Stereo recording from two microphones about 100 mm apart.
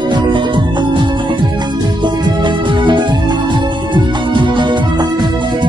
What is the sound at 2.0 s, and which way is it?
Music, 50° right (ahead or behind).